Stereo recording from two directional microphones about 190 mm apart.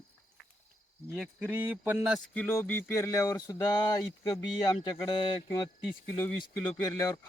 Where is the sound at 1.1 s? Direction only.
10° right (ahead or behind).